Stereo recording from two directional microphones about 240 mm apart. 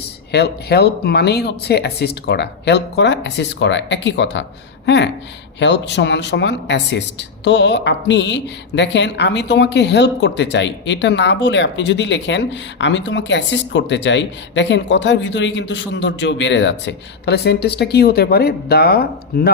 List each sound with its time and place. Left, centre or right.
0.3 s speech: left